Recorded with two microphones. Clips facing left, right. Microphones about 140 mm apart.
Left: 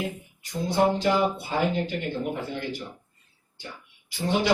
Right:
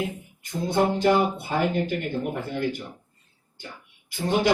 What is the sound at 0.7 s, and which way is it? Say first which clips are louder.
Music: right 2 dB; 50° right (ahead or behind).